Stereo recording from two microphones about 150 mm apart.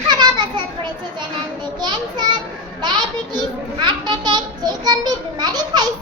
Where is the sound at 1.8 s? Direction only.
30° right (ahead or behind).